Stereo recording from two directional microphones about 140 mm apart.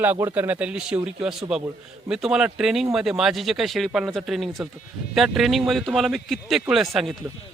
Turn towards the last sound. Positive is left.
turn(degrees=0)  # may be behind; listen again after turning